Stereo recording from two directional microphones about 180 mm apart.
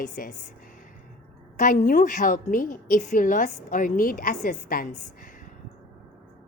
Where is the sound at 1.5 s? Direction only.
45° left (ahead or behind).